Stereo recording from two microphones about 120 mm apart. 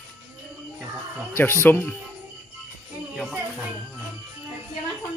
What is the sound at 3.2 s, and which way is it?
Music, 5° right (ahead or behind).